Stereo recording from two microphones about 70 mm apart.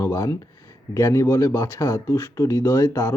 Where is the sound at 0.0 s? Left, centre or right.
Left.